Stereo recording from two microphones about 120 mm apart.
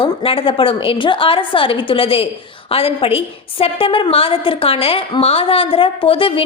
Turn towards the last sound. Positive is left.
turn(degrees=50)  # may be behind; listen again after turning